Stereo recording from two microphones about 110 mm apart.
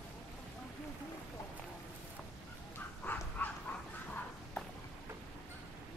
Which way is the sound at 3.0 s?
15° left (ahead or behind).